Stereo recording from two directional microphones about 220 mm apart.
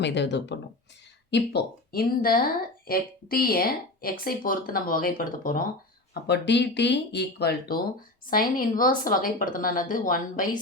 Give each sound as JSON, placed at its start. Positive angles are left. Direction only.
{"t": 0.0, "sound": "a woman's voice", "side_deg": 50}
{"t": 6.2, "sound": "a woman's voice", "side_deg": 50}